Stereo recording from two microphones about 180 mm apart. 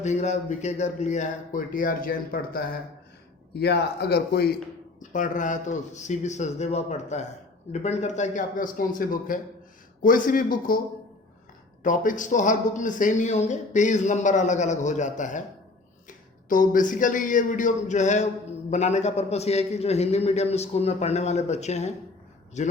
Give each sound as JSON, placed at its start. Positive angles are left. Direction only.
{"t": 0.0, "sound": "a man's voice", "side_deg": 40}
{"t": 3.6, "sound": "speech", "side_deg": 65}
{"t": 5.1, "sound": "a man's voice", "side_deg": 45}
{"t": 11.8, "sound": "a man's voice", "side_deg": 45}